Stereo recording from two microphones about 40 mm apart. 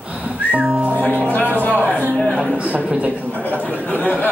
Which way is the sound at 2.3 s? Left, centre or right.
Right.